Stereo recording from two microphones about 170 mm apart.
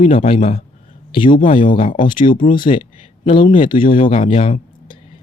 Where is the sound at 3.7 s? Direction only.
55° left (ahead or behind).